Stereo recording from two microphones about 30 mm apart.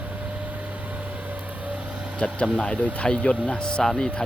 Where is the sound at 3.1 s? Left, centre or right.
Left.